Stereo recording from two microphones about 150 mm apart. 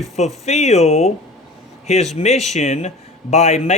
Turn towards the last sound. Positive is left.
turn(degrees=50)  # may be behind; listen again after turning